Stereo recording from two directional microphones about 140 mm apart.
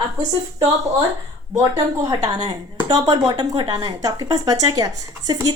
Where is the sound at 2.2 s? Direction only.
30° right (ahead or behind).